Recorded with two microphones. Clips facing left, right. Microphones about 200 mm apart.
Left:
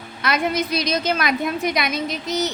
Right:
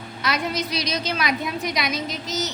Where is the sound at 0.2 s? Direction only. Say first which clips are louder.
Left 4 dB; 55° left (ahead or behind).